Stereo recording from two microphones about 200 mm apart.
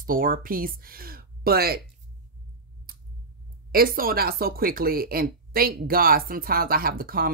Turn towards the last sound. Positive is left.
turn(degrees=-45)  # may be behind; listen again after turning